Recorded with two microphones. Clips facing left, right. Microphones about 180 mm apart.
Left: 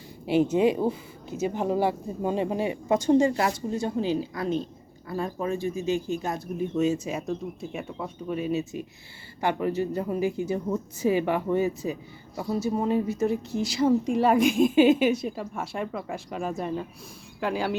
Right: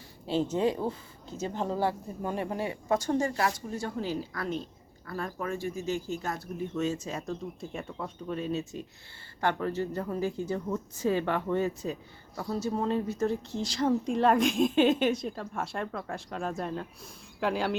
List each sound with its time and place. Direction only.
0.3 s a woman's voice: 10° left (ahead or behind)